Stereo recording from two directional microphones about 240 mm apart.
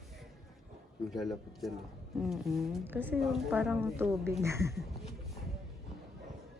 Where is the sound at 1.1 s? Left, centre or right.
Centre.